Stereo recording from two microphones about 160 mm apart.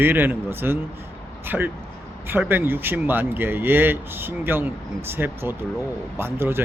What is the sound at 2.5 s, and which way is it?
Speech, 15° right (ahead or behind).